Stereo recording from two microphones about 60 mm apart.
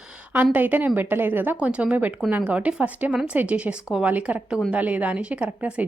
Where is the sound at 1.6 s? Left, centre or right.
Centre.